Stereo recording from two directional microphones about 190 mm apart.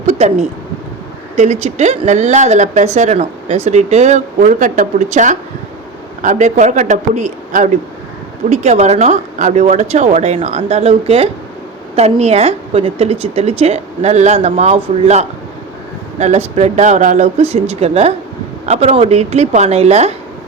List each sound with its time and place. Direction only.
0.2 s speech: 35° right (ahead or behind)